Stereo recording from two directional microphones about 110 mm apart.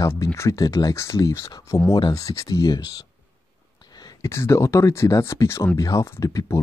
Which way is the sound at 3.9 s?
40° left (ahead or behind).